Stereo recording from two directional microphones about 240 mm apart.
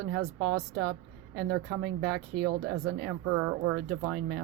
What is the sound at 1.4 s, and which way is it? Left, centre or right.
Speech, right.